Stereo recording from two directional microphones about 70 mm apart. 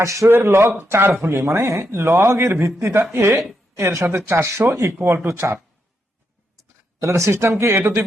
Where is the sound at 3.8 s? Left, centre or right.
Right.